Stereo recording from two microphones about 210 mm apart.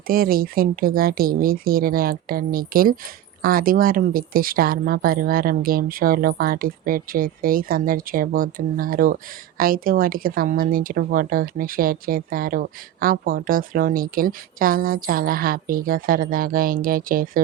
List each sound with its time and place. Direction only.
0.1 s a woman's voice: 45° right (ahead or behind)